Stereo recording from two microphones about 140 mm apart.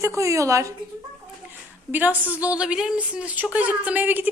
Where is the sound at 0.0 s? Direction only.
20° right (ahead or behind).